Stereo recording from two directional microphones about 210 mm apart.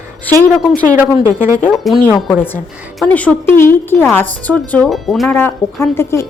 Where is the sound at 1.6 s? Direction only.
Centre (ahead or behind).